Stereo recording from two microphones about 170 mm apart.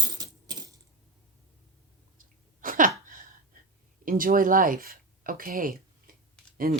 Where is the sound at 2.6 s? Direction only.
50° right (ahead or behind).